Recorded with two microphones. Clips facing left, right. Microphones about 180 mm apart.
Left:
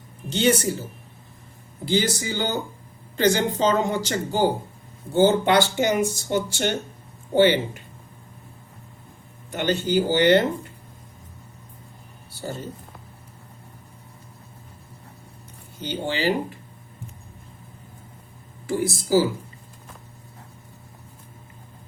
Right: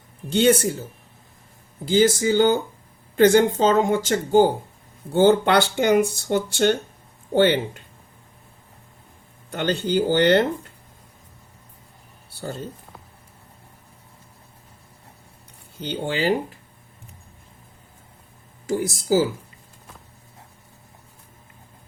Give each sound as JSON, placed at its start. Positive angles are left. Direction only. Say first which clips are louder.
{"t": 0.3, "sound": "speech", "louder": "right 3 dB", "side_deg": -55}
{"t": 1.9, "sound": "speech", "louder": "right 6 dB", "side_deg": -50}
{"t": 5.1, "sound": "speech", "louder": "right 1 dB", "side_deg": -60}
{"t": 9.8, "sound": "speech", "louder": "right 1 dB", "side_deg": -60}
{"t": 15.8, "sound": "speech", "louder": "right 1 dB", "side_deg": -55}
{"t": 18.7, "sound": "speech", "louder": "even", "side_deg": -45}